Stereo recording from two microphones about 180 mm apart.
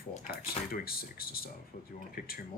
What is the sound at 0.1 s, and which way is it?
Speech, 45° left (ahead or behind).